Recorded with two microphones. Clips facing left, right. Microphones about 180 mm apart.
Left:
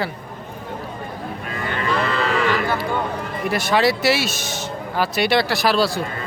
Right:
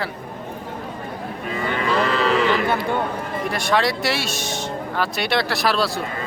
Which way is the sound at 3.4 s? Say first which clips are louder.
Left 3 dB; 5° left (ahead or behind).